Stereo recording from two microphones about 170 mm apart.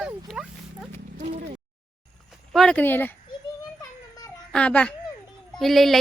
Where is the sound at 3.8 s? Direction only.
20° left (ahead or behind).